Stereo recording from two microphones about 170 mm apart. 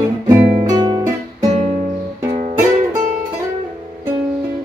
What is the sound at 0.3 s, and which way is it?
Guitar, 15° right (ahead or behind).